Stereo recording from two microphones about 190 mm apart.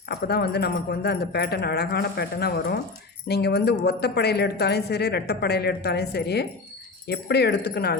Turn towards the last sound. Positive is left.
turn(degrees=60)  # may be behind; listen again after turning